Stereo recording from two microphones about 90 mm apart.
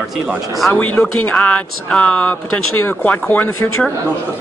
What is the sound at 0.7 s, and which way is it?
Speech, 20° left (ahead or behind).